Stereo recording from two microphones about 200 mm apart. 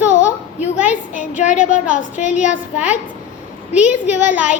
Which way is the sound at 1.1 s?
40° left (ahead or behind).